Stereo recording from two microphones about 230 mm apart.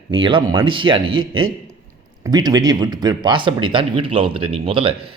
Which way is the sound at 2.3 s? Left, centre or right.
Centre.